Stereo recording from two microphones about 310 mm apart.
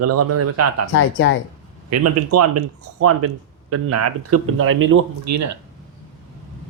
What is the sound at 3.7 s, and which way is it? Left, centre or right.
Speech, right.